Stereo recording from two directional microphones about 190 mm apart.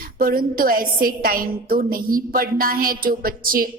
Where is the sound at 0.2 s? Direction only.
50° right (ahead or behind).